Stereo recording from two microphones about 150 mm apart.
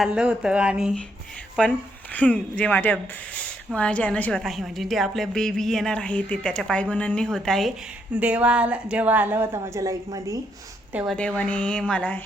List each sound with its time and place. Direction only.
0.0 s speech: 5° right (ahead or behind)
1.6 s a woman's voice: 5° left (ahead or behind)
8.1 s a woman's voice: 10° right (ahead or behind)
10.9 s a woman's voice: centre (ahead or behind)